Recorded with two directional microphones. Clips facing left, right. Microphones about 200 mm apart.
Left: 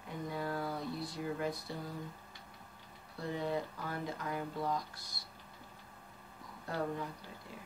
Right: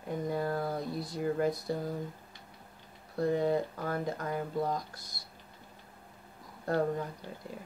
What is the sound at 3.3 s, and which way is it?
Speech, 45° right (ahead or behind).